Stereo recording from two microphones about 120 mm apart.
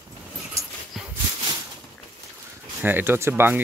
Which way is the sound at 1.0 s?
Centre (ahead or behind).